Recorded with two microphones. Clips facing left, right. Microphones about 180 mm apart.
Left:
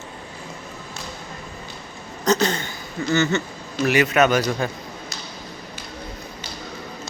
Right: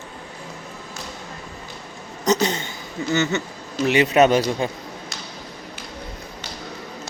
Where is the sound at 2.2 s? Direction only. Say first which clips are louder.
Even; 20° right (ahead or behind).